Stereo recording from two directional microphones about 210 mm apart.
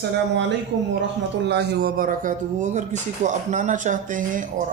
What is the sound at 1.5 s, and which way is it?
Speech, 55° right (ahead or behind).